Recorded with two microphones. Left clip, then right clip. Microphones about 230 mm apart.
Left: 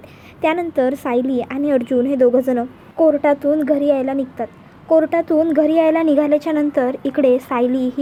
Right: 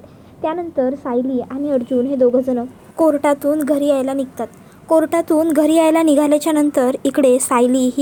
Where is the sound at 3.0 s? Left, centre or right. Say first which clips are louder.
Even; centre.